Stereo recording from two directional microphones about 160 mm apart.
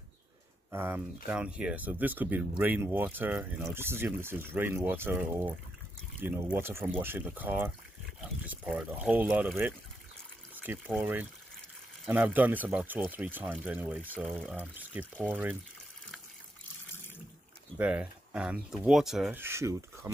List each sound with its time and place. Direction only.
0.7 s speech: 15° right (ahead or behind)
10.5 s speech: 10° right (ahead or behind)
17.7 s speech: 5° right (ahead or behind)
19.4 s speech: 15° right (ahead or behind)